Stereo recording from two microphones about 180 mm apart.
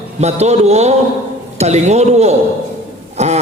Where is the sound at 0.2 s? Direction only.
40° right (ahead or behind).